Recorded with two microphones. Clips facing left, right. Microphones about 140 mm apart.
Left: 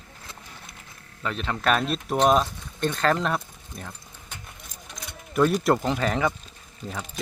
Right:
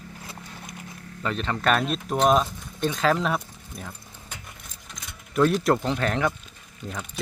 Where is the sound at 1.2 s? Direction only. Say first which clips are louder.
Right 2 dB; centre (ahead or behind).